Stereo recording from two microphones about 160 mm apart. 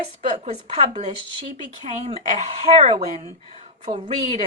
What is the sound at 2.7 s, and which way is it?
Speech, 40° right (ahead or behind).